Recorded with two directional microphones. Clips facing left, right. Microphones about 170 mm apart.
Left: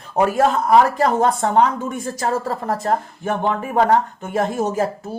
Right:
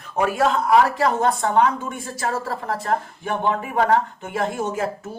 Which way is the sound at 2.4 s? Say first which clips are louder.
Left 4 dB; 40° left (ahead or behind).